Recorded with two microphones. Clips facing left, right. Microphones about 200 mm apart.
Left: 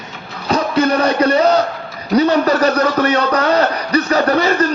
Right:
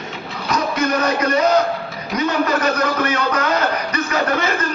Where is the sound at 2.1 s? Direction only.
35° left (ahead or behind).